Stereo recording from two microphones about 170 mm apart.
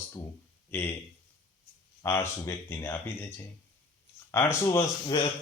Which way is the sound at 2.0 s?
15° left (ahead or behind).